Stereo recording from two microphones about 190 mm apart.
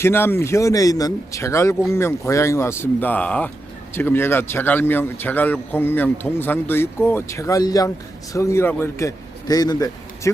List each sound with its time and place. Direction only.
0.0 s a man's voice: 10° left (ahead or behind)